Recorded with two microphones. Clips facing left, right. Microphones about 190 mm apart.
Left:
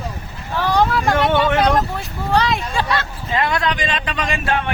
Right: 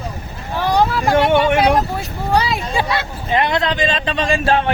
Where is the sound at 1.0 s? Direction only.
15° right (ahead or behind).